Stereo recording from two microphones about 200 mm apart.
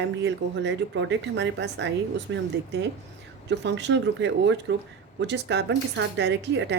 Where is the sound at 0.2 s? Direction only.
60° right (ahead or behind).